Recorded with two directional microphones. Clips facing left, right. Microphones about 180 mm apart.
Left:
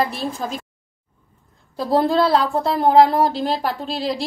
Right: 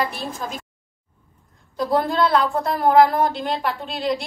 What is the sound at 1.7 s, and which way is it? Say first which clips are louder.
A woman's voice: left 3 dB; 35° left (ahead or behind).